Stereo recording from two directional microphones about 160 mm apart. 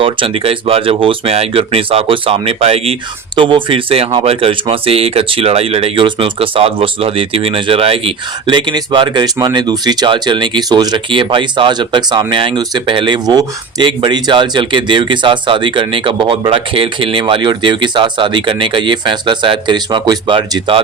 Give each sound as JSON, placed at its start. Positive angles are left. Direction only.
{"t": 0.0, "sound": "speech", "side_deg": -35}